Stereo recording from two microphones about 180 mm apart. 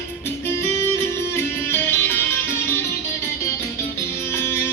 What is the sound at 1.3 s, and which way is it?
Music, 10° left (ahead or behind).